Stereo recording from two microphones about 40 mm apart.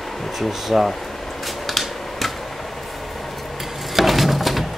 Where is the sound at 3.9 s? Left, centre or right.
Centre.